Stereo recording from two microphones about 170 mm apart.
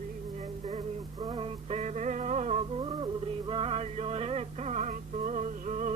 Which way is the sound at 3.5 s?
35° right (ahead or behind).